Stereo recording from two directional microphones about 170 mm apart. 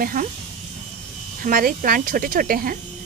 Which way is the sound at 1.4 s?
55° right (ahead or behind).